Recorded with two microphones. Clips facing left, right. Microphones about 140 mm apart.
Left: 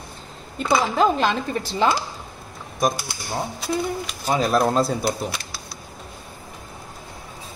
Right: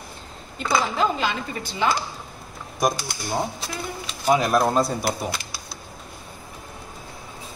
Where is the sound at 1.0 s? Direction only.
45° left (ahead or behind).